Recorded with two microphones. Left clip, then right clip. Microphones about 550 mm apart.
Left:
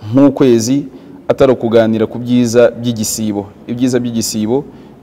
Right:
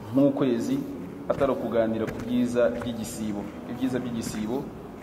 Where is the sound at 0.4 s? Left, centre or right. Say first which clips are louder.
Left 15 dB; left.